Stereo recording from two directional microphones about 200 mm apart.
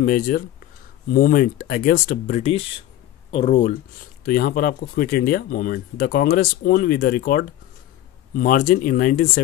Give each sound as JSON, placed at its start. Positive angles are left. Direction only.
{"t": 0.0, "sound": "speech", "side_deg": 45}
{"t": 4.2, "sound": "speech", "side_deg": 45}